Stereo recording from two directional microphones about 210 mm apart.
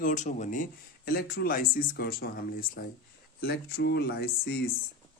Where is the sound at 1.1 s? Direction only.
50° left (ahead or behind).